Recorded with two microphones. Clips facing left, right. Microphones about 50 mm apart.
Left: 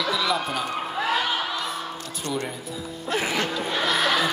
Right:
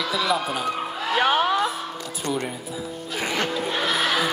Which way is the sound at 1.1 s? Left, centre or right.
Right.